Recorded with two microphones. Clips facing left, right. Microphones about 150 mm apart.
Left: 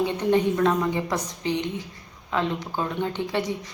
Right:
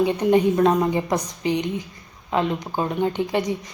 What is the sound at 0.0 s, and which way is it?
A woman's voice, 15° right (ahead or behind).